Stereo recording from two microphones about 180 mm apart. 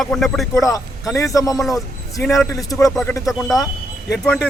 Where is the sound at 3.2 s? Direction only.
Centre (ahead or behind).